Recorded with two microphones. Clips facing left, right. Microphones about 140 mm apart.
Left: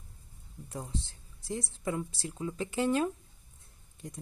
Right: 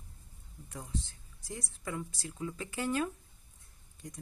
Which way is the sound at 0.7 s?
30° left (ahead or behind).